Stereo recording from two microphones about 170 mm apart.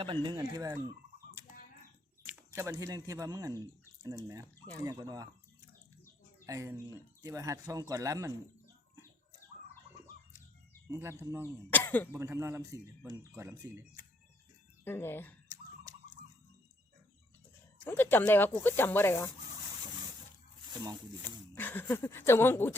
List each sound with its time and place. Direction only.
0.0 s speech: 30° right (ahead or behind)
2.2 s speech: 15° right (ahead or behind)
6.4 s speech: 20° right (ahead or behind)
11.2 s speech: 15° right (ahead or behind)
11.7 s speech: 10° left (ahead or behind)
12.1 s speech: 15° right (ahead or behind)
14.8 s speech: 15° left (ahead or behind)
15.4 s a sound: 20° right (ahead or behind)
17.8 s speech: 10° left (ahead or behind)
21.5 s speech: 10° left (ahead or behind)